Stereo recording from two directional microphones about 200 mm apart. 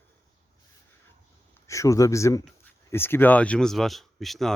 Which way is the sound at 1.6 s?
15° left (ahead or behind).